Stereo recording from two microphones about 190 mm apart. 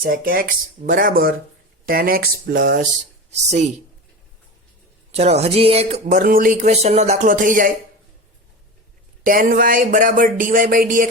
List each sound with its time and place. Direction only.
0.0 s speech: 50° right (ahead or behind)
5.1 s speech: 35° right (ahead or behind)
9.2 s speech: 45° right (ahead or behind)